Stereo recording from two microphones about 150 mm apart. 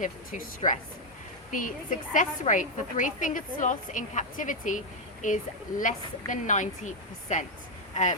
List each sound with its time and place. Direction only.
0.0 s a woman's voice: 60° left (ahead or behind)